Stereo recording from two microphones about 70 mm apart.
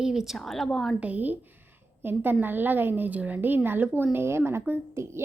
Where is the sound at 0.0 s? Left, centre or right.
Centre.